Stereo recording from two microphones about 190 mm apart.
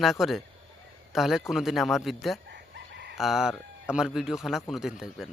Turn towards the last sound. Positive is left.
turn(degrees=0)  # may be behind; listen again after turning